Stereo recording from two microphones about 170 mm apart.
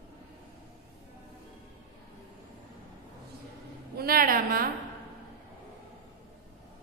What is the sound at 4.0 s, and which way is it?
Music, 60° right (ahead or behind).